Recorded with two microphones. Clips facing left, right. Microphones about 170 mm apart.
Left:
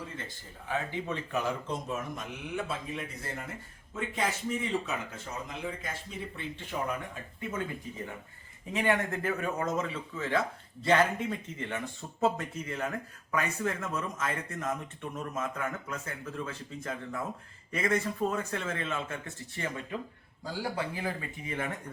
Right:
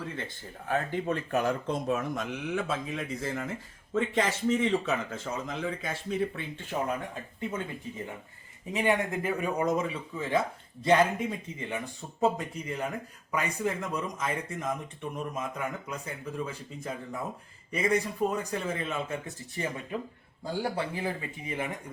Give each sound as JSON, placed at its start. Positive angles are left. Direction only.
{"t": 0.3, "sound": "speech", "side_deg": -55}
{"t": 2.6, "sound": "speech", "side_deg": -90}
{"t": 6.7, "sound": "speech", "side_deg": -40}
{"t": 8.7, "sound": "speech", "side_deg": -15}